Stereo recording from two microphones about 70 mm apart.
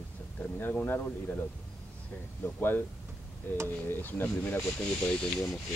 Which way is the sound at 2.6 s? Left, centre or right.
Left.